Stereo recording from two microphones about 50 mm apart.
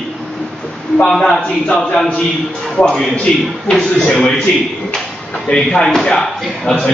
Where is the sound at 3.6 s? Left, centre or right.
Centre.